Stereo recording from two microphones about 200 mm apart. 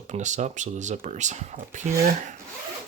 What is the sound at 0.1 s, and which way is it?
Speech, 35° right (ahead or behind).